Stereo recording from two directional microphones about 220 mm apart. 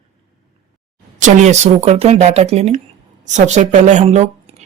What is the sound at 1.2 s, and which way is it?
A woman's voice, 35° right (ahead or behind).